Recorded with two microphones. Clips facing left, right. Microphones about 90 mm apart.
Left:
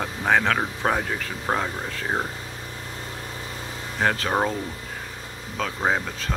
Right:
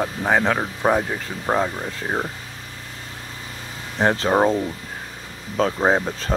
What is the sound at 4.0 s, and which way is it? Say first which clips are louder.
Speech: right 5 dB; 25° right (ahead or behind).